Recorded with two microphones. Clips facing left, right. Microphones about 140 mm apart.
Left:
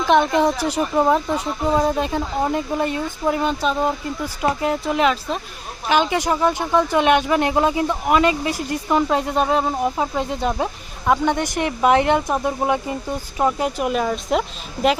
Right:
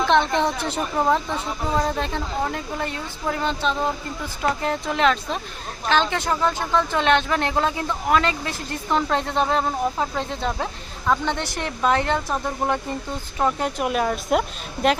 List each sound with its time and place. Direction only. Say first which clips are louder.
0.0 s speech: left 3 dB; 10° left (ahead or behind)
2.4 s speech: left 7 dB; 20° left (ahead or behind); by 14.9 s centre (ahead or behind)